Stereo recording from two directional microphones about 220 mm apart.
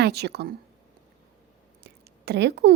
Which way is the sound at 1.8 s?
50° right (ahead or behind).